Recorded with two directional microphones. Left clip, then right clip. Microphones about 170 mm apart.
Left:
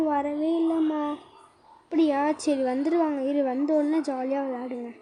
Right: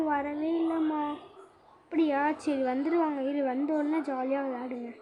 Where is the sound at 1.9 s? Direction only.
35° left (ahead or behind).